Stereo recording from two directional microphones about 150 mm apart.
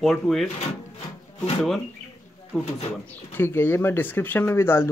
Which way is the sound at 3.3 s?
15° left (ahead or behind).